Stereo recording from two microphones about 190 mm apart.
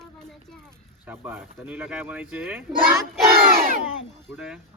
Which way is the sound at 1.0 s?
10° right (ahead or behind).